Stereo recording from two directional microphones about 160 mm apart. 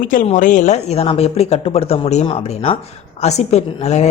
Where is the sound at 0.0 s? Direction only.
55° left (ahead or behind).